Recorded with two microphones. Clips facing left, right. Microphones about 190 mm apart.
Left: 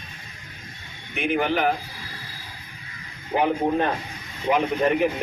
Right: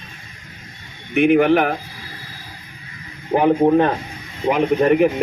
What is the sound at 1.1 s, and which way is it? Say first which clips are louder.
Speech: right 10 dB; 60° right (ahead or behind).